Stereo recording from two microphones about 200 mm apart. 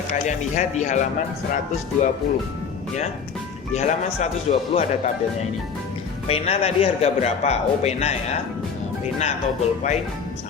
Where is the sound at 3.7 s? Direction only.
35° left (ahead or behind).